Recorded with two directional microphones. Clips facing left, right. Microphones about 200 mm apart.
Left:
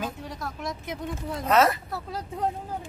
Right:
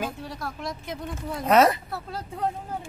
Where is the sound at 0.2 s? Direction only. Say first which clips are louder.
Right 1 dB; 20° left (ahead or behind).